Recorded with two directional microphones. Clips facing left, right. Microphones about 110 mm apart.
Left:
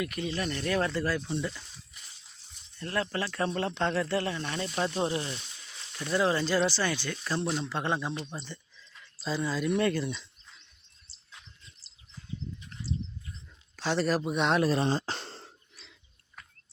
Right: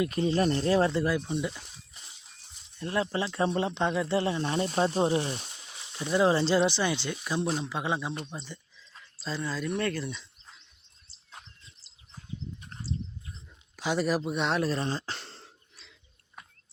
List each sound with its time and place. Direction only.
0.0 s speech: 30° right (ahead or behind); by 1.6 s 15° right (ahead or behind)
1.9 s a sound: 30° right (ahead or behind)
2.7 s speech: 20° right (ahead or behind)
5.8 s speech: 20° right (ahead or behind); by 10.2 s centre (ahead or behind)
11.4 s chirp: 50° right (ahead or behind)
11.8 s bird: 35° right (ahead or behind)
12.1 s a sound: 50° right (ahead or behind)
13.7 s speech: 10° right (ahead or behind)
14.8 s speech: 15° left (ahead or behind)
15.0 s throat clearing: 30° left (ahead or behind)